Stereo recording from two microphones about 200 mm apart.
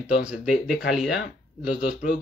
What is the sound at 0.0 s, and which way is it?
Speech, 5° right (ahead or behind).